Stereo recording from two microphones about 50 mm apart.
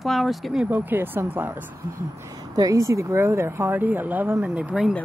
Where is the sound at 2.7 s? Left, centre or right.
Right.